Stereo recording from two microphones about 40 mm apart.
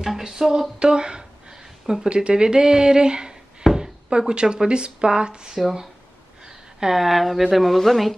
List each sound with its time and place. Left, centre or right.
0.0 s speech: centre
6.8 s a woman's voice: centre